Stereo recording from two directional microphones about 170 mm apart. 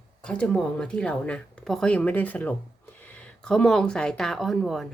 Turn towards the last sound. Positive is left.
turn(degrees=0)  # may be behind; listen again after turning